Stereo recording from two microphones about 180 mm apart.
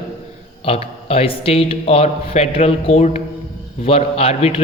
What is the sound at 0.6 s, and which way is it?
A man's voice, 35° left (ahead or behind).